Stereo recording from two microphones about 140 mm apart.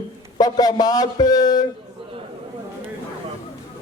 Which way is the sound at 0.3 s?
30° left (ahead or behind).